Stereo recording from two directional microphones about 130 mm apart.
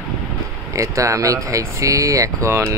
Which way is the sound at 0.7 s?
25° right (ahead or behind).